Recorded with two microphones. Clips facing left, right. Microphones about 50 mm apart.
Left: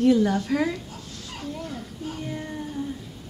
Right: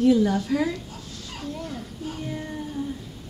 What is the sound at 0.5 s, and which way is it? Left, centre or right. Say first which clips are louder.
Speech: left 1 dB; left.